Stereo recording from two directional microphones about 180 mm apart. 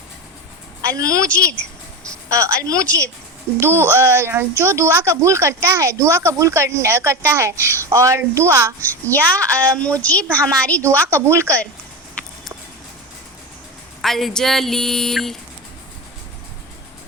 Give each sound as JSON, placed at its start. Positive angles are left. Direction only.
{"t": 0.8, "sound": "a woman's voice", "side_deg": -20}
{"t": 2.3, "sound": "speech", "side_deg": -15}
{"t": 2.8, "sound": "a child's voice", "side_deg": 10}
{"t": 3.6, "sound": "speech", "side_deg": -15}
{"t": 8.8, "sound": "a child's voice", "side_deg": 10}
{"t": 11.1, "sound": "speech", "side_deg": -15}
{"t": 11.4, "sound": "a child's voice", "side_deg": 5}
{"t": 14.0, "sound": "speech", "side_deg": 0}